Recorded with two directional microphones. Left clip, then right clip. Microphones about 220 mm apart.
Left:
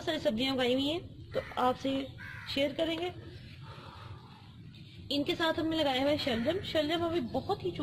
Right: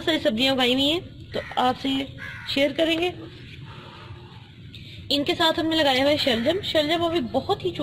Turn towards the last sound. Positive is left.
turn(degrees=-20)  # may be behind; listen again after turning